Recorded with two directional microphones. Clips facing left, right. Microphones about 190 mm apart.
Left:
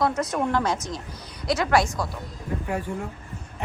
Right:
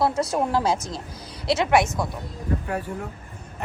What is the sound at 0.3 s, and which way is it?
Speech, 30° right (ahead or behind).